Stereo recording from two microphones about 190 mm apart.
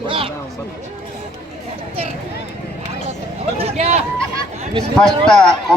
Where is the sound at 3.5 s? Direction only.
35° right (ahead or behind).